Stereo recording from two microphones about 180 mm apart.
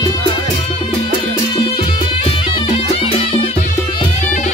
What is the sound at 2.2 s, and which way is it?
Music, 30° left (ahead or behind).